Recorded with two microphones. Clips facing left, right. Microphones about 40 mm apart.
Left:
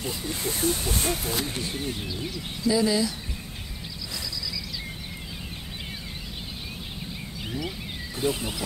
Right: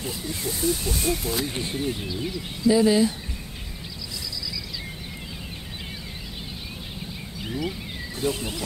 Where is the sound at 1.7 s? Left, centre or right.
Centre.